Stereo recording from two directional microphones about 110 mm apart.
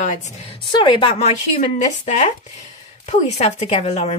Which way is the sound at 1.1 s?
85° left.